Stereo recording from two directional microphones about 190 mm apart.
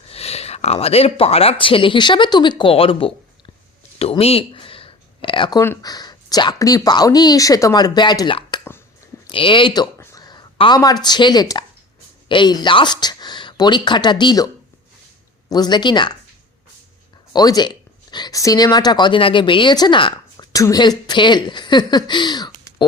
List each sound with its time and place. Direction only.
0.1 s speech: 30° left (ahead or behind)
17.3 s speech: 20° left (ahead or behind)